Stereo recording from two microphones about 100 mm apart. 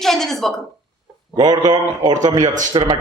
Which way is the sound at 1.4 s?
45° right (ahead or behind).